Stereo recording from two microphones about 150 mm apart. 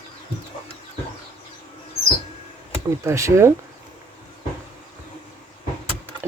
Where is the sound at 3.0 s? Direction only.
20° right (ahead or behind).